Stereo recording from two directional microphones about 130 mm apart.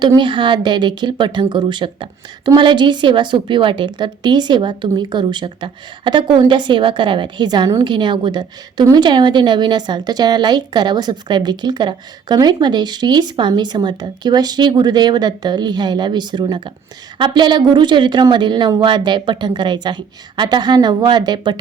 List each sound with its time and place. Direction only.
0.2 s a woman's voice: 40° right (ahead or behind)